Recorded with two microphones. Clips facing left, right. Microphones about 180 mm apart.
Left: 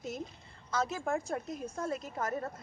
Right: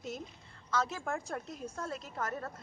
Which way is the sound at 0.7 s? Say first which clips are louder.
Left 2 dB; 10° left (ahead or behind).